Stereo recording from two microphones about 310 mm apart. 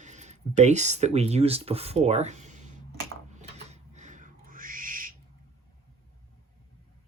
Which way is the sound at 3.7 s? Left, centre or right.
Right.